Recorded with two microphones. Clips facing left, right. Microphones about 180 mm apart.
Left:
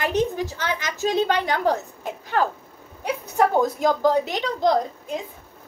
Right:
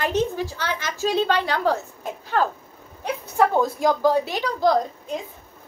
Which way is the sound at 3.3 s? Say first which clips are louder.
Even; 15° left (ahead or behind).